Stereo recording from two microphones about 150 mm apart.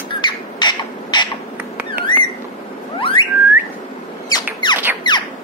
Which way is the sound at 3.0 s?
35° left (ahead or behind).